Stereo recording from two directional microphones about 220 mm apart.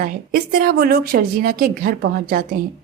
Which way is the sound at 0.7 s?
45° right (ahead or behind).